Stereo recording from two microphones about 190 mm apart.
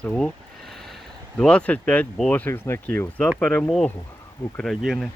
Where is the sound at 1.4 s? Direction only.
5° left (ahead or behind).